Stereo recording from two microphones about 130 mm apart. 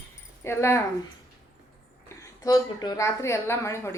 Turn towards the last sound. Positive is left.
turn(degrees=20)  # may be behind; listen again after turning